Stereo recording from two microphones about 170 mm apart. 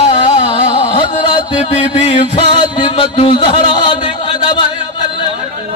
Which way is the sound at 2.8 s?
30° left (ahead or behind).